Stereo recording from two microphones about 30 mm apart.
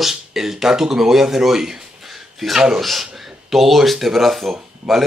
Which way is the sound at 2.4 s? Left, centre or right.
Centre.